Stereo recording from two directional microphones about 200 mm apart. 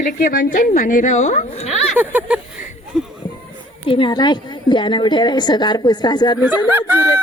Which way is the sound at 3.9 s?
25° left (ahead or behind).